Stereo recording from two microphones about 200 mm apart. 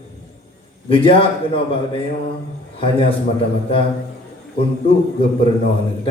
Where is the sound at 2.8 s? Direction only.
25° left (ahead or behind).